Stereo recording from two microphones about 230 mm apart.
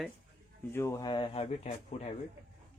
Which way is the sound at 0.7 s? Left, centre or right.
Centre.